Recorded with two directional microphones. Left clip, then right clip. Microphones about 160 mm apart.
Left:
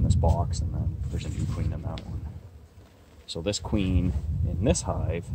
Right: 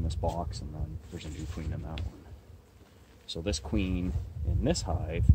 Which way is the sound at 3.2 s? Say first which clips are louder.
Left 5 dB; 35° left (ahead or behind).